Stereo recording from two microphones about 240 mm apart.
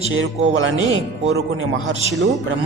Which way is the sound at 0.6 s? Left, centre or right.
Right.